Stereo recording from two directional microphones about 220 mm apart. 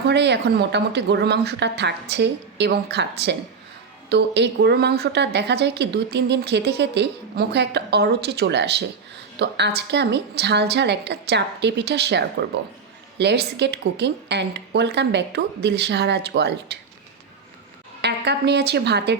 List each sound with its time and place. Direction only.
0.0 s a woman's voice: 50° right (ahead or behind)
18.0 s a woman's voice: 50° right (ahead or behind)